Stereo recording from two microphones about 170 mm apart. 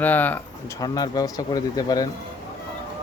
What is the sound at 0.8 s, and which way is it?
Speech, 20° left (ahead or behind).